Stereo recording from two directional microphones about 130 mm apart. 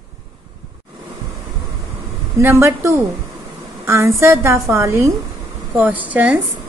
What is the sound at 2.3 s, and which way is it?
A woman's voice, 20° right (ahead or behind).